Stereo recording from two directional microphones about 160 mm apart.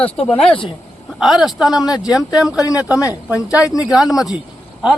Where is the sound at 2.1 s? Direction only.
Centre (ahead or behind).